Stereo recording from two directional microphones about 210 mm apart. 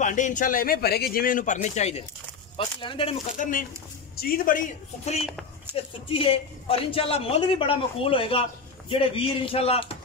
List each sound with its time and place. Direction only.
0.0 s a man's voice: 35° left (ahead or behind)
3.3 s a man's voice: 40° left (ahead or behind)
5.7 s speech: 10° right (ahead or behind)
6.0 s a man's voice: 25° left (ahead or behind)